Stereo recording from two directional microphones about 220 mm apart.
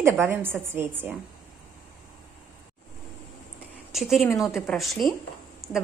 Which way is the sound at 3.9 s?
Centre (ahead or behind).